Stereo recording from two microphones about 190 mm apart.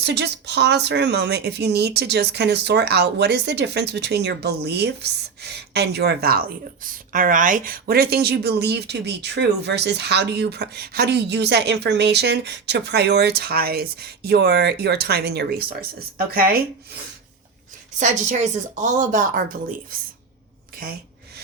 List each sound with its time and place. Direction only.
0.0 s speech: 60° right (ahead or behind)
18.0 s speech: 40° right (ahead or behind)